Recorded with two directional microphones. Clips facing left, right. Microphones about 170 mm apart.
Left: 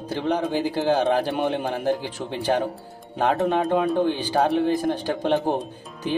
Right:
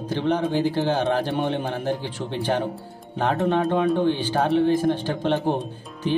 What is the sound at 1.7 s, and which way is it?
Speech, 45° left (ahead or behind).